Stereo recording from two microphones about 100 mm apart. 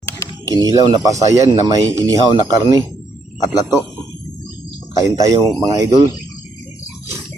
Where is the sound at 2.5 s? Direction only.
40° right (ahead or behind).